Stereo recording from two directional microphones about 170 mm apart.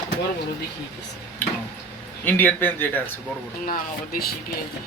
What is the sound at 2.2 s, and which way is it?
Speech, 10° left (ahead or behind).